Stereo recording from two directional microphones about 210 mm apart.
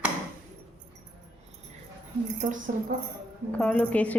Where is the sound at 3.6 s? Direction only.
5° left (ahead or behind).